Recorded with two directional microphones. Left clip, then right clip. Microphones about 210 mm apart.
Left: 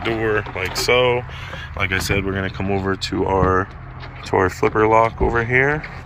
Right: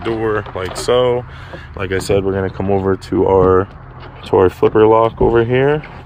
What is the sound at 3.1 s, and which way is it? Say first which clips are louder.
Speech: right 7 dB; 55° right (ahead or behind).